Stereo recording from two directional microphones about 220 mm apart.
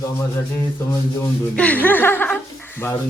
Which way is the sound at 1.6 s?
5° left (ahead or behind).